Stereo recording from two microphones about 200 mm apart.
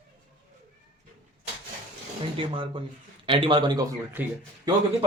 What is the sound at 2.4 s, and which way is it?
A man's voice, 25° right (ahead or behind).